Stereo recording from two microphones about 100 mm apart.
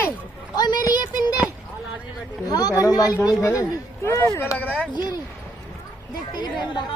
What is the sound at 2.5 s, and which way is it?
Speech, 40° left (ahead or behind).